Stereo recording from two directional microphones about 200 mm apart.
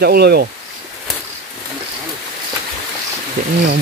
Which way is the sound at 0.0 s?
55° right (ahead or behind).